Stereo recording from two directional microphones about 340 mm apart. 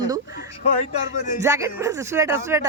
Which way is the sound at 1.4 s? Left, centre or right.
Centre.